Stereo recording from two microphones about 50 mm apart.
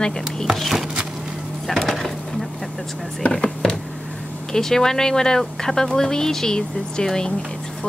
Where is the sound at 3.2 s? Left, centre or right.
Left.